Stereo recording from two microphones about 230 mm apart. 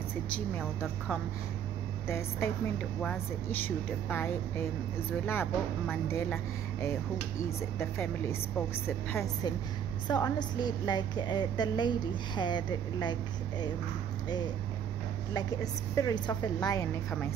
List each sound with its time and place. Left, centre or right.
0.3 s a woman's voice: centre
15.3 s a woman's voice: centre